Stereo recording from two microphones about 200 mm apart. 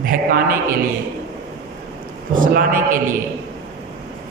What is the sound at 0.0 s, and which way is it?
Speech, 45° right (ahead or behind).